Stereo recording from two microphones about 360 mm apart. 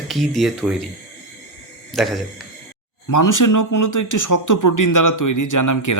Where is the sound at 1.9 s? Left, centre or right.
Centre.